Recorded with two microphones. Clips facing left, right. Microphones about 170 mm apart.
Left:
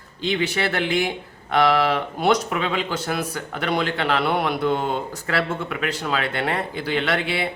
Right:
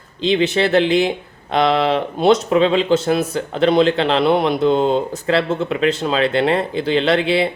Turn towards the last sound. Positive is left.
turn(degrees=-25)  # may be behind; listen again after turning